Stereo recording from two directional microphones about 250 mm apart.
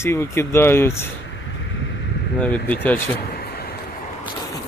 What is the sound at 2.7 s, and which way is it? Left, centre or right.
Speech, centre.